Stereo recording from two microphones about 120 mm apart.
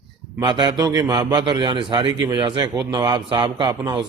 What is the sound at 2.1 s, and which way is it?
A man's voice, 30° right (ahead or behind).